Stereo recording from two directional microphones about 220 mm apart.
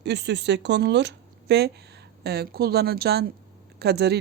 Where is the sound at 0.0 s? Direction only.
50° right (ahead or behind).